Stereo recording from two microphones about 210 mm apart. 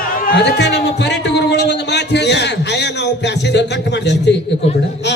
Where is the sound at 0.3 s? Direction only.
55° left (ahead or behind).